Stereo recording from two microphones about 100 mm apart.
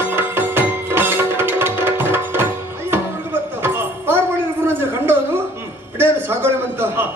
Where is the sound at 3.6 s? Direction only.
25° right (ahead or behind).